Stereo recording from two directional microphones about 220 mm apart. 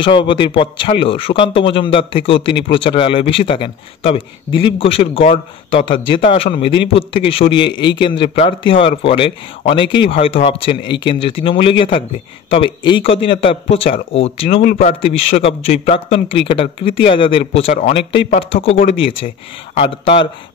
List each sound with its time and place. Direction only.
0.0 s a man's voice: 20° left (ahead or behind)
7.7 s a man's voice: 55° left (ahead or behind)
8.0 s a man's voice: 25° left (ahead or behind)
14.6 s a man's voice: 40° left (ahead or behind)
14.9 s a man's voice: 25° left (ahead or behind)